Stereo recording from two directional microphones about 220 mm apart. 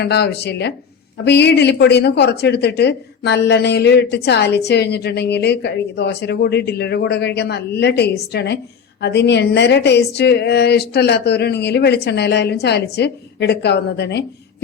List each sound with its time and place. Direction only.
0.0 s speech: 50° left (ahead or behind)